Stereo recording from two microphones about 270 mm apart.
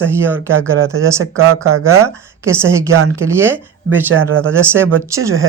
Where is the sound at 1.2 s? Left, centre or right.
Right.